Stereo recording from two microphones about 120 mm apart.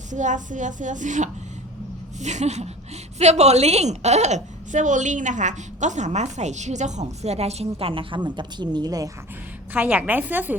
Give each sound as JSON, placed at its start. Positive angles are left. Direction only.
{"t": 0.1, "sound": "a sound", "side_deg": -90}
{"t": 2.2, "sound": "a woman's voice", "side_deg": -70}
{"t": 9.7, "sound": "a woman's voice", "side_deg": -15}